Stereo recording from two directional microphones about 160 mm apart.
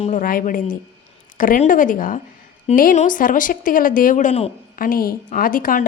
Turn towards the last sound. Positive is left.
turn(degrees=60)  # may be behind; listen again after turning